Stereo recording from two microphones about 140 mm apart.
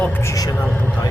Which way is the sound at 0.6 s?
10° left (ahead or behind).